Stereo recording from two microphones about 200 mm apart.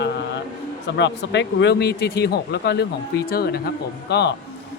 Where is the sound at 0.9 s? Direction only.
60° left (ahead or behind).